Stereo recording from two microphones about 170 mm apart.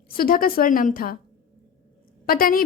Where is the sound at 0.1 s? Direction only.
60° left (ahead or behind).